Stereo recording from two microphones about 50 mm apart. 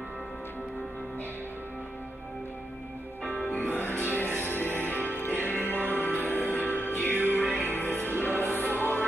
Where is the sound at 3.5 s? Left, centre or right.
Left.